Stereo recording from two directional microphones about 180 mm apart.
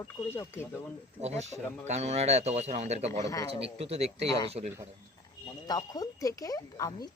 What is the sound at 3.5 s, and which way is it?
Speech, 35° right (ahead or behind).